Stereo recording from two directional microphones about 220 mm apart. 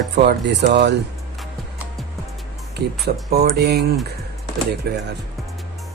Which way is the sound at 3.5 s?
45° right (ahead or behind).